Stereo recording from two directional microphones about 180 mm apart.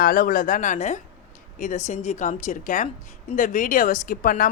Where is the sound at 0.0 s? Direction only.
50° left (ahead or behind).